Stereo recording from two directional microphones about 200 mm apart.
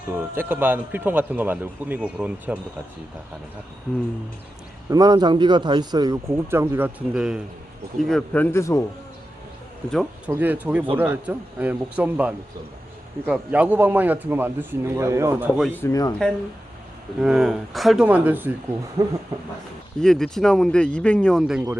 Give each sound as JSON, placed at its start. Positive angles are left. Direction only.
{"t": 0.2, "sound": "a man's voice", "side_deg": -10}
{"t": 4.9, "sound": "a man's voice", "side_deg": -20}
{"t": 9.9, "sound": "a man's voice", "side_deg": 0}
{"t": 15.7, "sound": "a man's voice", "side_deg": 15}
{"t": 17.2, "sound": "a man's voice", "side_deg": 0}
{"t": 20.0, "sound": "speech", "side_deg": 5}